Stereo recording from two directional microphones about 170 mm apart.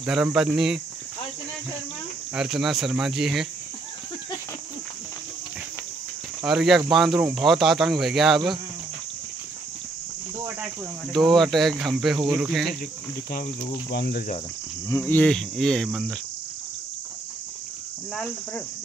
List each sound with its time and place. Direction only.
0.0 s speech: 5° right (ahead or behind)
2.3 s speech: 5° right (ahead or behind)
6.4 s speech: 5° right (ahead or behind)
11.1 s speech: centre (ahead or behind)
13.8 s cricket: 75° left (ahead or behind)
14.9 s speech: 15° left (ahead or behind)